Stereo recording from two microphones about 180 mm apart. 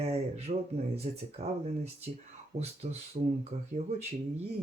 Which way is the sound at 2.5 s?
35° right (ahead or behind).